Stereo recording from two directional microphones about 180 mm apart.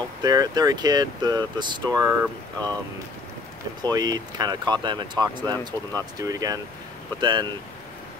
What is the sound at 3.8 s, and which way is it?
Speech, 20° right (ahead or behind).